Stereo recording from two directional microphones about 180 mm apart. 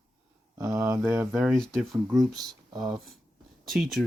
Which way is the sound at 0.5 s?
15° right (ahead or behind).